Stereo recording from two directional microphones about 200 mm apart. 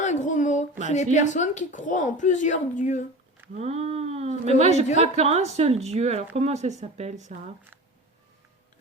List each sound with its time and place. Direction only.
0.0 s a sound: 35° left (ahead or behind)
0.9 s speech: 35° left (ahead or behind)
3.5 s speech: 30° right (ahead or behind)